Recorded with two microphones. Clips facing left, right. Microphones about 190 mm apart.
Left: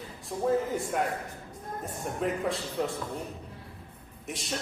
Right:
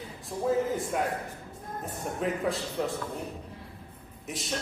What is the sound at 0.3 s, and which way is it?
Speech, centre (ahead or behind).